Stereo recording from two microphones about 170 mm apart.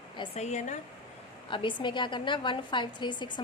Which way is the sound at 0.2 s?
40° left (ahead or behind).